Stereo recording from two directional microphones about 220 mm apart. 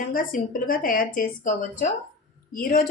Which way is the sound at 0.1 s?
40° left (ahead or behind).